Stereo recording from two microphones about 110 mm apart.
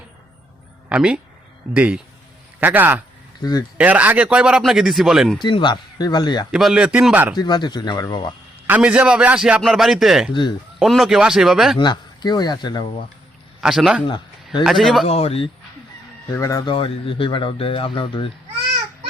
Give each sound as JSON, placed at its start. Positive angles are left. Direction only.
{"t": 0.9, "sound": "speech", "side_deg": -10}
{"t": 3.4, "sound": "speech", "side_deg": 35}
{"t": 3.8, "sound": "speech", "side_deg": -15}
{"t": 5.4, "sound": "speech", "side_deg": 45}
{"t": 6.5, "sound": "speech", "side_deg": -5}
{"t": 7.3, "sound": "speech", "side_deg": 40}
{"t": 8.6, "sound": "speech", "side_deg": -15}
{"t": 11.8, "sound": "speech", "side_deg": 40}
{"t": 13.6, "sound": "speech", "side_deg": -5}
{"t": 15.0, "sound": "speech", "side_deg": 65}
{"t": 16.3, "sound": "speech", "side_deg": 30}
{"t": 16.6, "sound": "speech", "side_deg": 55}